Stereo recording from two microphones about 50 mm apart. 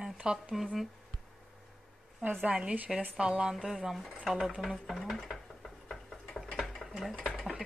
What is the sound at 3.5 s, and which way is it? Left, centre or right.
Speech, centre.